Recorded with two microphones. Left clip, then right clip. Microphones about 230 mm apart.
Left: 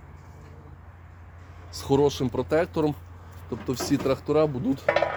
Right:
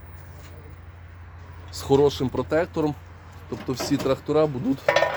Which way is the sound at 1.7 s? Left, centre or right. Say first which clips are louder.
Right 3 dB; centre.